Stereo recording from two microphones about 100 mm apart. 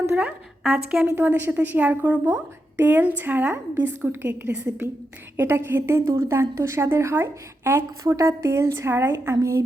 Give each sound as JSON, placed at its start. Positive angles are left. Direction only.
{"t": 0.6, "sound": "a woman's voice", "side_deg": -5}
{"t": 1.0, "sound": "a woman's voice", "side_deg": -20}